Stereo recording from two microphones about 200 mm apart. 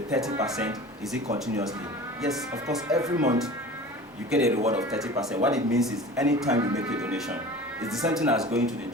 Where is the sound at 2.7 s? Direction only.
Centre (ahead or behind).